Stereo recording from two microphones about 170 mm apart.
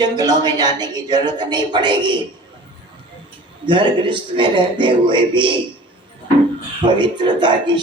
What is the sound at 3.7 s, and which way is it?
A man's voice, 30° right (ahead or behind).